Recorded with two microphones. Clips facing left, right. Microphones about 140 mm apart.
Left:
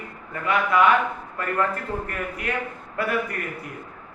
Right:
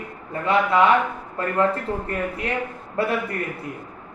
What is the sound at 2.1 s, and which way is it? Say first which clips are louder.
Speech: right 3 dB; 25° right (ahead or behind).